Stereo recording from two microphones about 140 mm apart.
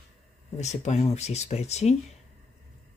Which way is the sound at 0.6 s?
55° left (ahead or behind).